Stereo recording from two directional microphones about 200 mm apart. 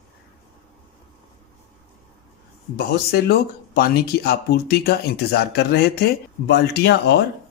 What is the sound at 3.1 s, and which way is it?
Speech, 50° left (ahead or behind).